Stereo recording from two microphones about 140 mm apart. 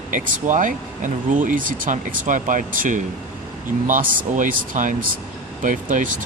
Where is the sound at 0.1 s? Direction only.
70° right (ahead or behind).